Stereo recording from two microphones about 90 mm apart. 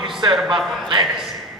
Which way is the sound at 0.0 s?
60° right (ahead or behind).